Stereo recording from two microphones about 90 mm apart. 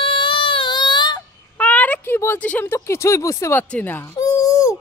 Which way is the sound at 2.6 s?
30° left (ahead or behind).